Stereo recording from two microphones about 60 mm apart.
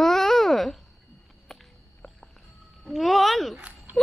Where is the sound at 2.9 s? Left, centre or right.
Centre.